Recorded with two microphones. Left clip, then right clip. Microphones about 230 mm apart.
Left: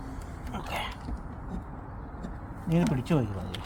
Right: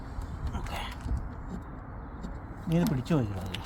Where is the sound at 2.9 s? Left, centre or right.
Centre.